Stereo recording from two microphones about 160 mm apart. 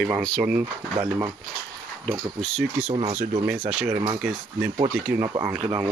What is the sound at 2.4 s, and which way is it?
Speech, centre (ahead or behind).